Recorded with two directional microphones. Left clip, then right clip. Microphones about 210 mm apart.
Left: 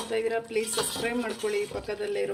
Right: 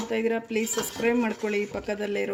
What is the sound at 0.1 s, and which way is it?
A woman's voice, 45° right (ahead or behind).